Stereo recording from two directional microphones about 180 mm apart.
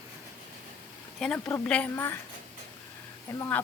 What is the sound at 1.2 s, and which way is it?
Speech, 5° left (ahead or behind).